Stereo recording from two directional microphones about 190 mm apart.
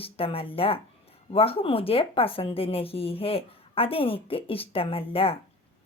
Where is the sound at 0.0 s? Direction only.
30° left (ahead or behind).